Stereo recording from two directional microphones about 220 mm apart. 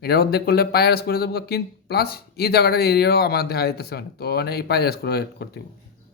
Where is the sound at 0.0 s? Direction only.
45° left (ahead or behind).